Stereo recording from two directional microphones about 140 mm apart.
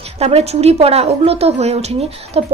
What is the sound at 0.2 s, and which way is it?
A woman's voice, 50° right (ahead or behind).